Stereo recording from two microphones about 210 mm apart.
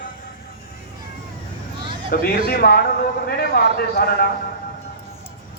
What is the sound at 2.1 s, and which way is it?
Speech, 45° left (ahead or behind).